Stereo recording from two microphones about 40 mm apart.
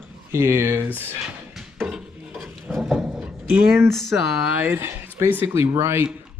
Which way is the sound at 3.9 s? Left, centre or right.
Centre.